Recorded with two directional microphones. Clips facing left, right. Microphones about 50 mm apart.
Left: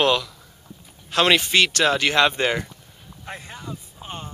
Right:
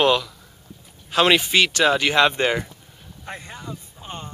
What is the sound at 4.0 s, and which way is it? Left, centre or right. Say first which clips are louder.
Music: even; centre.